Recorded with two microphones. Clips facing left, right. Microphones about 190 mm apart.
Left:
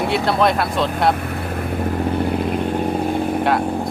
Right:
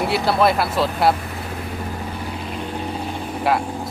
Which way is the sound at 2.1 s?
55° left (ahead or behind).